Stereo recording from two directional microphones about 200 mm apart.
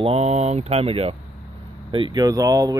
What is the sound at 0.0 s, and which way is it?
Speech, 30° right (ahead or behind).